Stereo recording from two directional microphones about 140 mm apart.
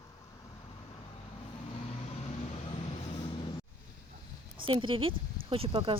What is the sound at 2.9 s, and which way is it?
Vehicle, 40° left (ahead or behind).